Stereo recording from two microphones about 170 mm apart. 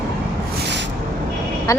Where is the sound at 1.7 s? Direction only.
20° left (ahead or behind).